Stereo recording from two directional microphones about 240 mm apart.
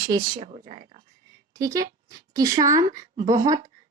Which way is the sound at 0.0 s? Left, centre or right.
Centre.